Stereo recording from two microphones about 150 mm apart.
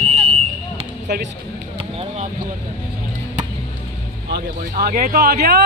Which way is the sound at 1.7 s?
40° right (ahead or behind).